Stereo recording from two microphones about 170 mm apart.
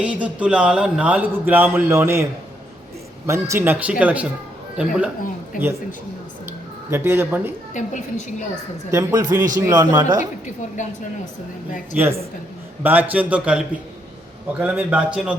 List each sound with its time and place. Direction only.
0.0 s speech: 5° right (ahead or behind)
3.2 s speech: 15° right (ahead or behind)
6.9 s speech: 15° right (ahead or behind)
7.7 s a woman's voice: 45° left (ahead or behind)
8.9 s speech: 15° right (ahead or behind)
11.9 s speech: 15° right (ahead or behind)